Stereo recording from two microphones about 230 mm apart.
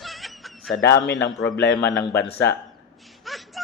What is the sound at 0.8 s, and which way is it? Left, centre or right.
Speech, left.